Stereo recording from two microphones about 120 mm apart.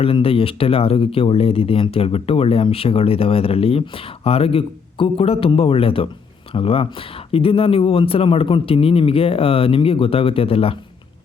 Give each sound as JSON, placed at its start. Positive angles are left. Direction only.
{"t": 0.0, "sound": "speech", "side_deg": 50}